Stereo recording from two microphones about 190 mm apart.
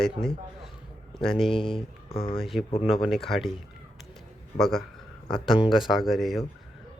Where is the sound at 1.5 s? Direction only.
25° left (ahead or behind).